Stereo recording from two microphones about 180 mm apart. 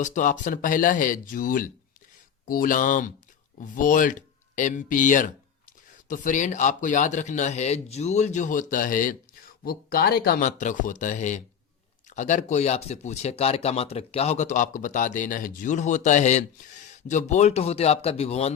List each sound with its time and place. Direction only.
0.0 s speech: 45° left (ahead or behind)